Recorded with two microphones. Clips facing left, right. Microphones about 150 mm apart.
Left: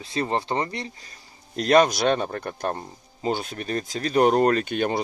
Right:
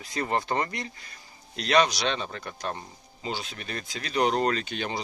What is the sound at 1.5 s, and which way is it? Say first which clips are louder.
Speech: left 5 dB; 45° left (ahead or behind).